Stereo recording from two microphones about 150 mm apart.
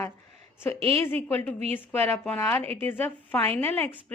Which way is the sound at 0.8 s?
40° right (ahead or behind).